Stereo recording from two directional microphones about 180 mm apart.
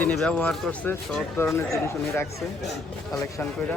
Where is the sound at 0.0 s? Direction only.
5° left (ahead or behind).